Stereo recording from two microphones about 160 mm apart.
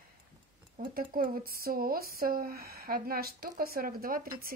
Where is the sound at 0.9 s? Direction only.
60° right (ahead or behind).